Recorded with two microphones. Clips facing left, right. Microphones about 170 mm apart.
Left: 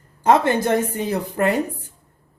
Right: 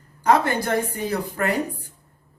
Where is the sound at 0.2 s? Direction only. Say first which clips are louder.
Left 3 dB; 25° left (ahead or behind).